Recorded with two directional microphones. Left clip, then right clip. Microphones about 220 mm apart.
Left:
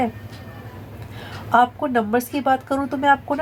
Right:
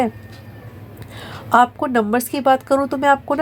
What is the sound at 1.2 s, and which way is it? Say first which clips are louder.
Speech: right 3 dB; 45° right (ahead or behind).